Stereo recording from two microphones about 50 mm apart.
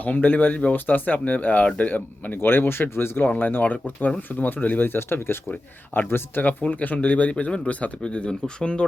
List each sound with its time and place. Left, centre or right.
0.0 s speech: left
2.4 s speech: left
4.9 s speech: left
6.4 s speech: left; by 8.8 s centre